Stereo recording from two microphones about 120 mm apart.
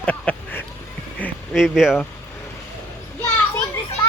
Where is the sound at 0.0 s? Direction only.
10° left (ahead or behind).